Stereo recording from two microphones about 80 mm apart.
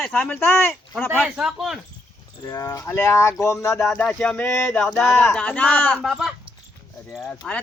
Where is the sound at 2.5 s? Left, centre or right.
Left.